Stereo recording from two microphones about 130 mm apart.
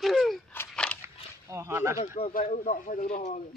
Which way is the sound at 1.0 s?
20° right (ahead or behind).